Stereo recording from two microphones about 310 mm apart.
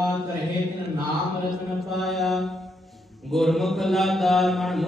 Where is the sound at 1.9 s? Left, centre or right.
Centre.